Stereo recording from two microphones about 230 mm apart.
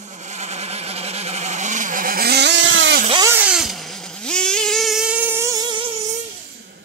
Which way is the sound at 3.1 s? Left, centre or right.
Centre.